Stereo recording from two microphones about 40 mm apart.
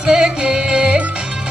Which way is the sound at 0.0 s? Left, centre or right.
Centre.